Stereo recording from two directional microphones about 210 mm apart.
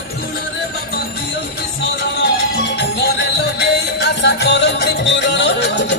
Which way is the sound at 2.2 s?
55° left (ahead or behind).